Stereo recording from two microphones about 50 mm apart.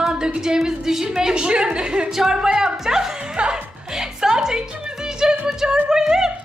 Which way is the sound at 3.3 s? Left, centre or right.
Centre.